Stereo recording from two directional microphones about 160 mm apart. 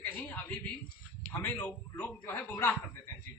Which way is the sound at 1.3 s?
10° left (ahead or behind).